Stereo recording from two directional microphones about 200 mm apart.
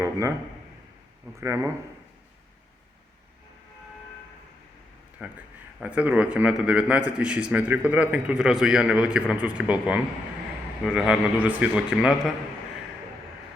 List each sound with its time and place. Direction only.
0.0 s a man's voice: 15° right (ahead or behind)
1.4 s speech: 15° right (ahead or behind)
5.2 s a man's voice: 5° right (ahead or behind)